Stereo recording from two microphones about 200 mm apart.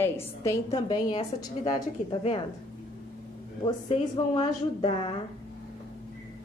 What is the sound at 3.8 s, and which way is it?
A woman's voice, 30° left (ahead or behind).